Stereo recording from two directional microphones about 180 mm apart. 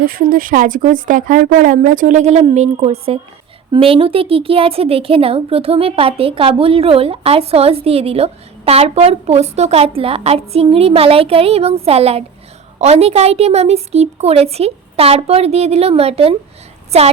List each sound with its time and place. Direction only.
0.0 s speech: 55° right (ahead or behind); by 16.3 s 35° right (ahead or behind)